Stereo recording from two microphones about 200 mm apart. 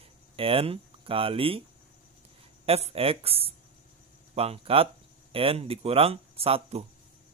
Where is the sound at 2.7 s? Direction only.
30° right (ahead or behind).